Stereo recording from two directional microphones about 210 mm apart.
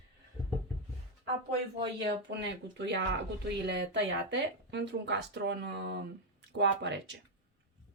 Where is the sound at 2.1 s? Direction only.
55° right (ahead or behind).